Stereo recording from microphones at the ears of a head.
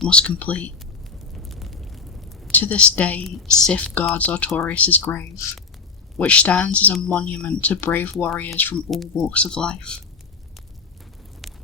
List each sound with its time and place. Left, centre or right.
0.0 s speech: left
1.5 s a sound: centre
2.6 s speech: left